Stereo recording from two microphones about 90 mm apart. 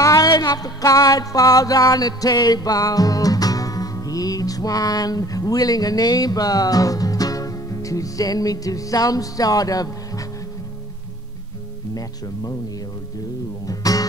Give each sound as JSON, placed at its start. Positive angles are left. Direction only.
{"t": 0.0, "sound": "music", "side_deg": 40}
{"t": 13.7, "sound": "music", "side_deg": 40}